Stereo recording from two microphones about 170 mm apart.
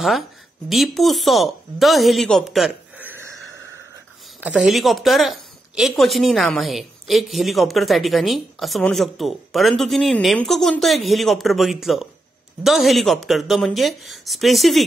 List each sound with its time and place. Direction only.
0.7 s a woman's voice: centre (ahead or behind)
4.4 s a woman's voice: 10° right (ahead or behind)